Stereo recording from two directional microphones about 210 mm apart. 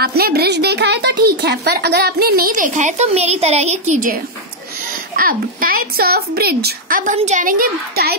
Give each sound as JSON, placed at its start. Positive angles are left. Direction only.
{"t": 0.0, "sound": "a child's voice", "side_deg": -50}